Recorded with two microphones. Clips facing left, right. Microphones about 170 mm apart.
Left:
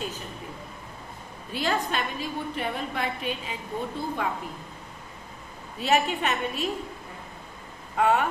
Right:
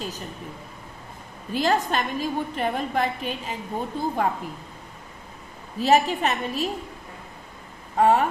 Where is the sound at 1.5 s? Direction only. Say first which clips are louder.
Right 5 dB; 45° right (ahead or behind).